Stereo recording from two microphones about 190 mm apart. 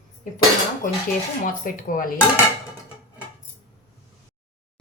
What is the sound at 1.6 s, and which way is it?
Speech, 45° left (ahead or behind).